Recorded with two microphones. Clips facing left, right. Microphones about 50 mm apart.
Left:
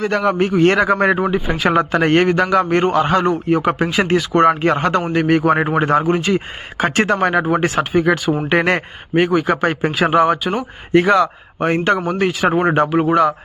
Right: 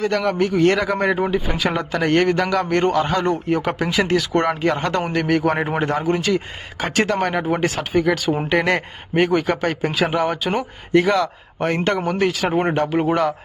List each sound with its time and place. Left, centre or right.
0.1 s speech: left
2.2 s a man's voice: left
3.0 s speech: left
3.2 s speech: centre
3.8 s a man's voice: left
5.1 s speech: centre
5.9 s a man's voice: left
9.1 s speech: centre
9.6 s a man's voice: left
10.5 s speech: centre
11.1 s a man's voice: centre
12.9 s speech: centre